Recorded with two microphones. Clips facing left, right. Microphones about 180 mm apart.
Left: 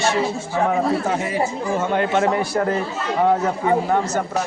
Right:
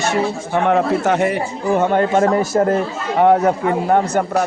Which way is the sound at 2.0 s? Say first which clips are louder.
Right 4 dB; 40° right (ahead or behind).